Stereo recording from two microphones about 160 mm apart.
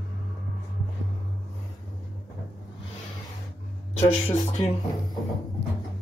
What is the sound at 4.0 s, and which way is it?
Speech, 40° left (ahead or behind).